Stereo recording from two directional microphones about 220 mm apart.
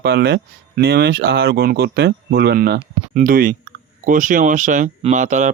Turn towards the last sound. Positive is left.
turn(degrees=-35)  # may be behind; listen again after turning